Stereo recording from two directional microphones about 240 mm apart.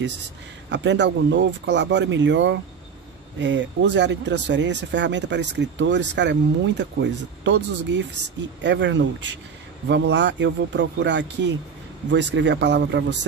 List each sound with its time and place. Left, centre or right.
0.7 s speech: right